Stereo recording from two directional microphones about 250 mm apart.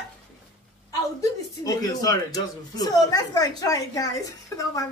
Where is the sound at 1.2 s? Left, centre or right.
Centre.